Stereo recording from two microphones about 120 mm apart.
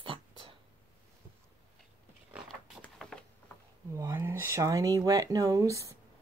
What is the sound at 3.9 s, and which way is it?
Speech, 25° right (ahead or behind).